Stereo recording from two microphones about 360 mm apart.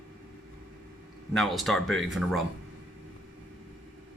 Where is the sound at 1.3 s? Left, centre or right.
Centre.